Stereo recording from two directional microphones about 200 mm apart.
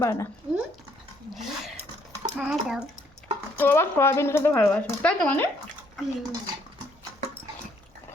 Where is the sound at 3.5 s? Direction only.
10° left (ahead or behind).